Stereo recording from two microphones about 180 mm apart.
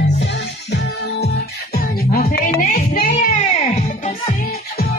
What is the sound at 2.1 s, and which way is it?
Music, 50° left (ahead or behind).